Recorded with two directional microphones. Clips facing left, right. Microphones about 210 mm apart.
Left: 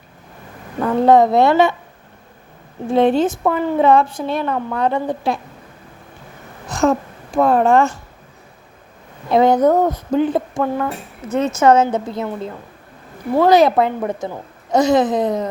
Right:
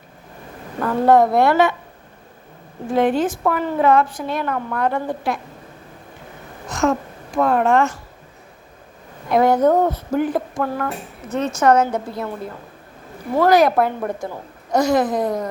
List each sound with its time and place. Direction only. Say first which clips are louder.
0.8 s a woman's voice: left 2 dB; 15° left (ahead or behind)
2.9 s a woman's voice: left 3 dB; 25° left (ahead or behind)
6.7 s speech: left 3 dB; 30° left (ahead or behind)
9.3 s a woman's voice: left 2 dB; 20° left (ahead or behind)
13.3 s a woman's voice: left 2 dB; 20° left (ahead or behind)